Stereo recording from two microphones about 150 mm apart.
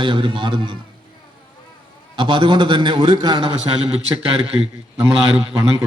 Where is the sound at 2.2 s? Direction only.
35° right (ahead or behind).